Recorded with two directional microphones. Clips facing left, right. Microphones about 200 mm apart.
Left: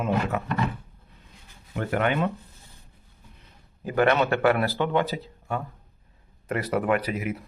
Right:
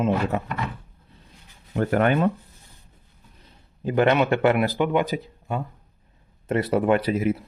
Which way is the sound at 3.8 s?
25° right (ahead or behind).